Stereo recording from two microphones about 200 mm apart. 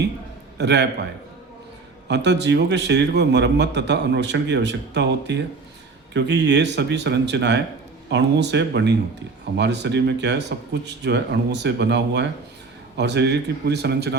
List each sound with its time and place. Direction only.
0.6 s a man's voice: 60° right (ahead or behind)
2.0 s a man's voice: 60° right (ahead or behind)